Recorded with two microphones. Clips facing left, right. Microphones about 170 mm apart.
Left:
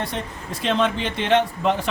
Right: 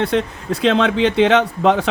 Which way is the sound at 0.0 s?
70° right (ahead or behind).